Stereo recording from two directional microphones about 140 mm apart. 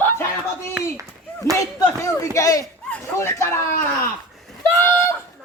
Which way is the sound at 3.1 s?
20° left (ahead or behind).